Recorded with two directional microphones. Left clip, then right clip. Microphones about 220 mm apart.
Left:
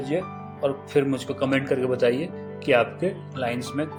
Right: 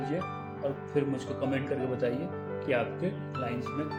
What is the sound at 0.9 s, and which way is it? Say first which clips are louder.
Speech: left 8 dB; 55° right (ahead or behind).